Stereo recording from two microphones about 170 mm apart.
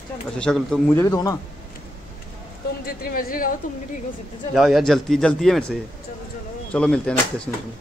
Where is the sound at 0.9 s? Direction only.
20° left (ahead or behind).